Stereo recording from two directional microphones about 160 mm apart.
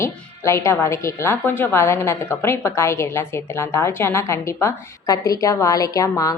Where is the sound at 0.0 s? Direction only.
20° left (ahead or behind).